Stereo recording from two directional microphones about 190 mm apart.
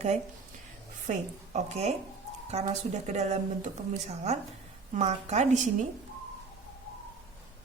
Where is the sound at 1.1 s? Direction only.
40° right (ahead or behind).